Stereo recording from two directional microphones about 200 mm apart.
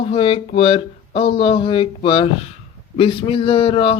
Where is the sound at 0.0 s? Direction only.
25° left (ahead or behind).